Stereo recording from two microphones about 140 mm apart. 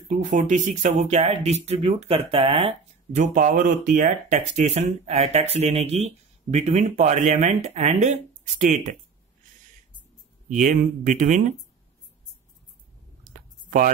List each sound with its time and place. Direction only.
0.1 s speech: 65° right (ahead or behind); by 2.7 s 40° right (ahead or behind)
3.2 s speech: 70° right (ahead or behind)
10.5 s speech: 65° right (ahead or behind)
13.2 s a sound: 70° right (ahead or behind)